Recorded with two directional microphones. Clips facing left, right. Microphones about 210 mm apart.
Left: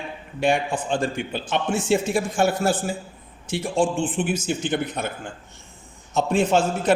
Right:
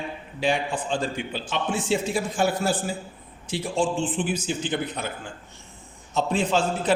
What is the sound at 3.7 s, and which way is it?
A man's voice, 50° left (ahead or behind).